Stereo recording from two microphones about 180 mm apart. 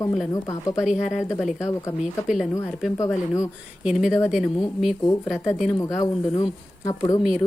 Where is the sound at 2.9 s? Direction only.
15° left (ahead or behind).